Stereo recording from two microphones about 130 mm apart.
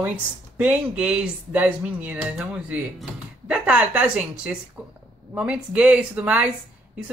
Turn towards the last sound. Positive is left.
turn(degrees=-10)  # may be behind; listen again after turning